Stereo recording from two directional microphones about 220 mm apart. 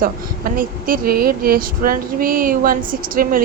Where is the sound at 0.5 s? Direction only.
40° right (ahead or behind).